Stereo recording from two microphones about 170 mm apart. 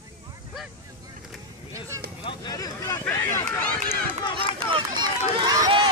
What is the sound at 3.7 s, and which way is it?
Run, 10° left (ahead or behind).